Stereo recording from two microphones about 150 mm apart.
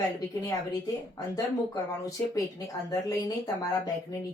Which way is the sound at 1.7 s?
25° left (ahead or behind).